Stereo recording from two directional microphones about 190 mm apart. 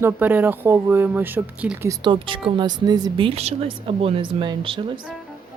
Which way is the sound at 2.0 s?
25° right (ahead or behind).